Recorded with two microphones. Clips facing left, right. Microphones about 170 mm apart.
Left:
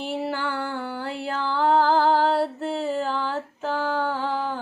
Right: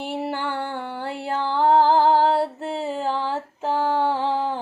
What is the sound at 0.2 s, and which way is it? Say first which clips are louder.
Music: right 1 dB; 25° right (ahead or behind).